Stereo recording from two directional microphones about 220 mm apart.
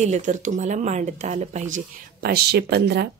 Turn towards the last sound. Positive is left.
turn(degrees=-50)  # may be behind; listen again after turning